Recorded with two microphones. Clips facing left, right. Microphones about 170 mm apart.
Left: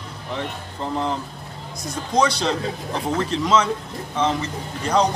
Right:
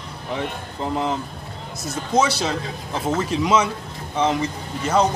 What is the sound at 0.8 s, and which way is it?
A man's voice, 5° right (ahead or behind).